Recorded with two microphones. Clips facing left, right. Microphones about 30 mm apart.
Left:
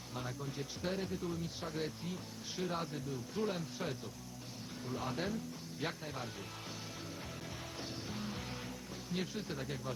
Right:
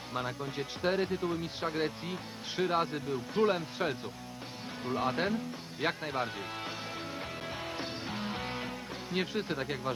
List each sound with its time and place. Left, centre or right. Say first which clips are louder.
0.1 s speech: right 7 dB; right
7.8 s music: right 6 dB; right
9.1 s speech: right 8 dB; right